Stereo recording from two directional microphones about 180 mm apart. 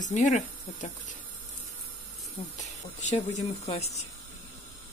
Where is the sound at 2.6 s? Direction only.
40° left (ahead or behind).